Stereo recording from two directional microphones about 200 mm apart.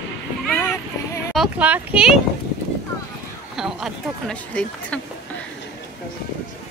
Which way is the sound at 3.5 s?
Centre (ahead or behind).